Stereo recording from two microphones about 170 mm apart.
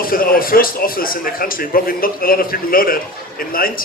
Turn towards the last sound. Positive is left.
turn(degrees=60)  # may be behind; listen again after turning